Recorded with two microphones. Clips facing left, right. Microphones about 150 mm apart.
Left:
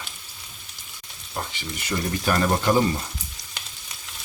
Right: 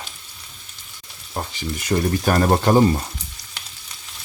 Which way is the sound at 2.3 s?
40° right (ahead or behind).